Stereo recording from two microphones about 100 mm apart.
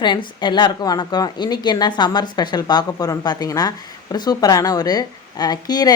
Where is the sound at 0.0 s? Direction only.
50° left (ahead or behind).